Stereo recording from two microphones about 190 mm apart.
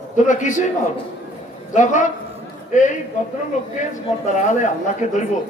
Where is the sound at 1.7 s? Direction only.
40° left (ahead or behind).